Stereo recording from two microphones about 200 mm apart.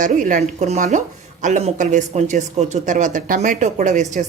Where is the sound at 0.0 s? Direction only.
40° right (ahead or behind).